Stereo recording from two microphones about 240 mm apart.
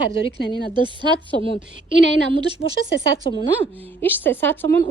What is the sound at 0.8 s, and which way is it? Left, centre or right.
Speech, centre.